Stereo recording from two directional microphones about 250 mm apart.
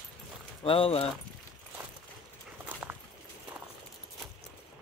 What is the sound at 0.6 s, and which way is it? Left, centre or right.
Speech, left.